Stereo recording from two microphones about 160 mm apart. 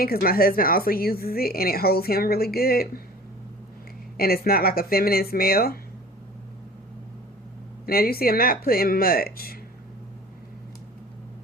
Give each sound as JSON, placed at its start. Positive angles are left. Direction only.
{"t": 0.0, "sound": "a woman's voice", "side_deg": 70}
{"t": 4.2, "sound": "a woman's voice", "side_deg": 70}
{"t": 7.9, "sound": "a woman's voice", "side_deg": 70}